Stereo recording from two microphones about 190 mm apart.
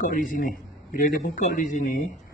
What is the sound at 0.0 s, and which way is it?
A man's voice, 45° left (ahead or behind).